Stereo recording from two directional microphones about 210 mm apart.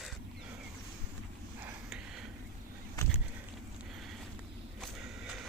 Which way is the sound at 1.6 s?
Centre (ahead or behind).